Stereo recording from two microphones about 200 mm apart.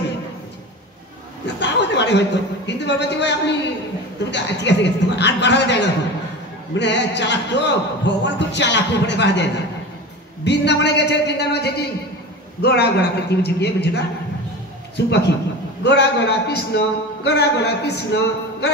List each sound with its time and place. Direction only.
1.6 s a man's voice: 60° left (ahead or behind)
15.0 s a man's voice: 60° left (ahead or behind)